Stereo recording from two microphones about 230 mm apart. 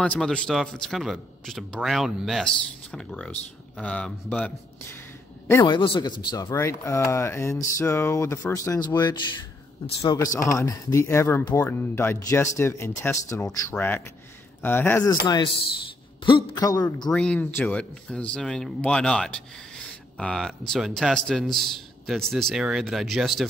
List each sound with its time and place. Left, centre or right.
0.0 s speech: centre
5.5 s speech: centre
17.1 s speech: centre